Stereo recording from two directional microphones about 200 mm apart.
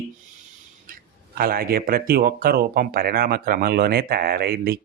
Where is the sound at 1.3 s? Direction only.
50° right (ahead or behind).